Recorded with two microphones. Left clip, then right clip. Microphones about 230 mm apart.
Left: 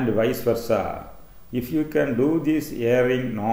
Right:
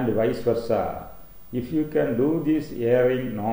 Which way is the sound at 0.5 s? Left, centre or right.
Centre.